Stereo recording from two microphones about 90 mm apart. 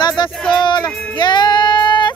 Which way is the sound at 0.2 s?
55° left (ahead or behind).